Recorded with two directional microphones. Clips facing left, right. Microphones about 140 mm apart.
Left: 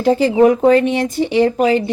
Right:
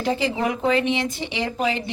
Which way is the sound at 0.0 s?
45° left (ahead or behind).